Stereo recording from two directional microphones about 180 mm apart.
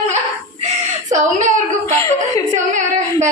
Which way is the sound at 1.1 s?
40° right (ahead or behind).